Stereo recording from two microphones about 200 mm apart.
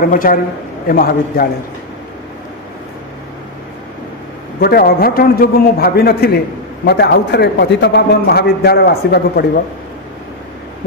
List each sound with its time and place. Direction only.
0.0 s a man's voice: 45° left (ahead or behind)
4.6 s a man's voice: 50° left (ahead or behind)